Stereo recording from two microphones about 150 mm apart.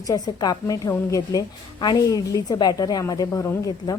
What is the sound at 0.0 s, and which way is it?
A woman's voice, 25° left (ahead or behind).